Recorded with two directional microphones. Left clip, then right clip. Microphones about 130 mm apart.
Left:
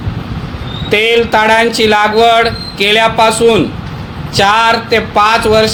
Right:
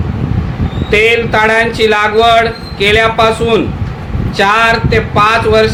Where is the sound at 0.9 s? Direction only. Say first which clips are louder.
Even; 60° left (ahead or behind).